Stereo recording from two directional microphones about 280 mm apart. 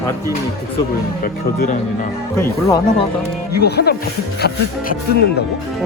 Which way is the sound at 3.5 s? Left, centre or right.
Left.